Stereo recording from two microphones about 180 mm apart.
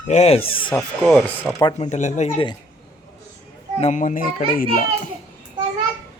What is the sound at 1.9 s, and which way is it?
Speech, 40° left (ahead or behind).